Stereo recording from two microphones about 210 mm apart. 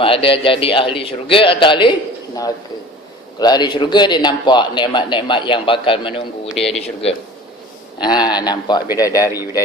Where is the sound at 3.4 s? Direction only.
20° left (ahead or behind).